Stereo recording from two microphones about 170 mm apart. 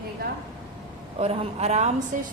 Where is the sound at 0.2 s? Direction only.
65° right (ahead or behind).